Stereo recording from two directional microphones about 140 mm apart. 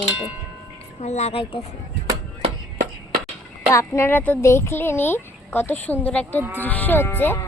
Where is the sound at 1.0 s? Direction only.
50° left (ahead or behind).